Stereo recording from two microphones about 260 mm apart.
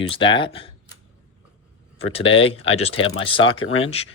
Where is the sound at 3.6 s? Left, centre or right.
Left.